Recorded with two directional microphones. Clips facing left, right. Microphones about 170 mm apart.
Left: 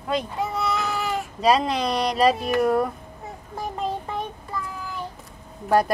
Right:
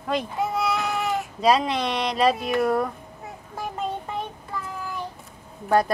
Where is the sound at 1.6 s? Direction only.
35° left (ahead or behind).